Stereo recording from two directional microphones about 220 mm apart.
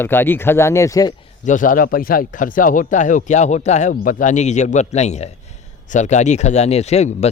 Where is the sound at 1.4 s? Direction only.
35° left (ahead or behind).